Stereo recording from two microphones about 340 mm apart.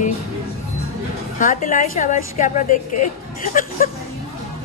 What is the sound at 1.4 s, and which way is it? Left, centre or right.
A woman's voice, left.